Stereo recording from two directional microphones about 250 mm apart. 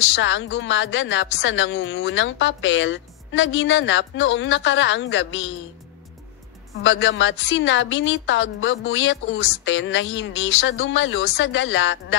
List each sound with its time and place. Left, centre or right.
0.1 s a woman's voice: left
6.8 s a woman's voice: left